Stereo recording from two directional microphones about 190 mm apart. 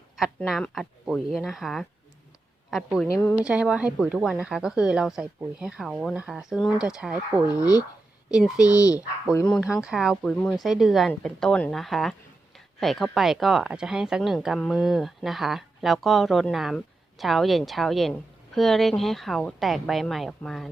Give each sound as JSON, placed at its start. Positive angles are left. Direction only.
{"t": 0.2, "sound": "speech", "side_deg": 0}
{"t": 3.4, "sound": "speech", "side_deg": -5}
{"t": 7.6, "sound": "speech", "side_deg": 20}
{"t": 8.3, "sound": "speech", "side_deg": -5}
{"t": 9.3, "sound": "speech", "side_deg": 5}
{"t": 9.6, "sound": "speech", "side_deg": -5}